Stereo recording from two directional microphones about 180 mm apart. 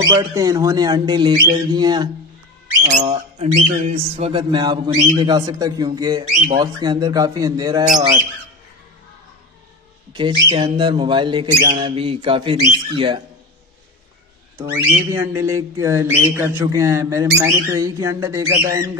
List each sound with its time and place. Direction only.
0.0 s speech: 20° right (ahead or behind)
3.1 s speech: 35° right (ahead or behind); by 8.1 s 20° right (ahead or behind)
10.1 s speech: 25° right (ahead or behind)
14.6 s speech: 15° right (ahead or behind)